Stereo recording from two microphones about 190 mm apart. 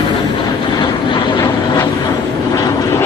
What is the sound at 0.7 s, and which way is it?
Vehicle, 20° left (ahead or behind).